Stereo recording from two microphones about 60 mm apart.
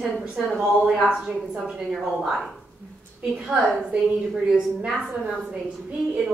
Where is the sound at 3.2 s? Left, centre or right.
Centre.